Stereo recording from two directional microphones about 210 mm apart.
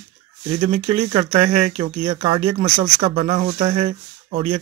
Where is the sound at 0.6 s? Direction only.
25° right (ahead or behind).